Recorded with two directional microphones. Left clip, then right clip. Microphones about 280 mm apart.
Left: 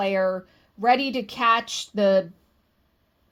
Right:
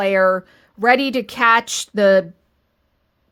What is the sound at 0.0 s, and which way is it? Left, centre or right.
Speech, right.